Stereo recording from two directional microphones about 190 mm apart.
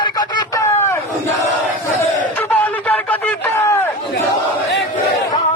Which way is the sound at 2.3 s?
10° left (ahead or behind).